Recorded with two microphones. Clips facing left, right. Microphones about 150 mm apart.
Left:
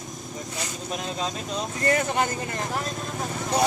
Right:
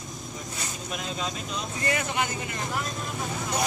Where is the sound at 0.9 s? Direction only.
35° left (ahead or behind).